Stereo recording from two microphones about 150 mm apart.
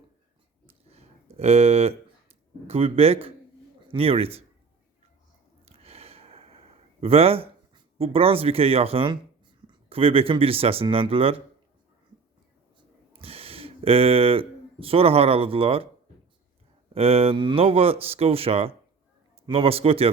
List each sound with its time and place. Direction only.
0.7 s a sound: 45° right (ahead or behind)
2.6 s speech: 40° right (ahead or behind)
5.6 s a sound: 40° right (ahead or behind)
7.0 s speech: 40° right (ahead or behind)
13.1 s speech: 40° right (ahead or behind)
16.9 s speech: 40° right (ahead or behind)